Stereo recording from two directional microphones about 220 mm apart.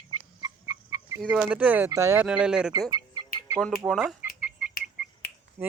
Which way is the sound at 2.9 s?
20° right (ahead or behind).